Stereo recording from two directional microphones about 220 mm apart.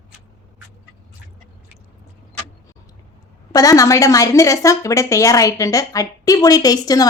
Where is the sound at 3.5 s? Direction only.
15° left (ahead or behind).